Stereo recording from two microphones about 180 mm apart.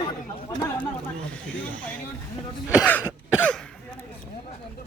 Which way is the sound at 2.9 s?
10° left (ahead or behind).